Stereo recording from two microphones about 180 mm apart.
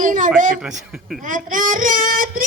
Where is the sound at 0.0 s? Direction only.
45° right (ahead or behind).